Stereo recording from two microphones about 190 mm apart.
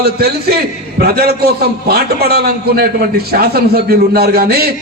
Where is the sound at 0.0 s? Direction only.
55° right (ahead or behind).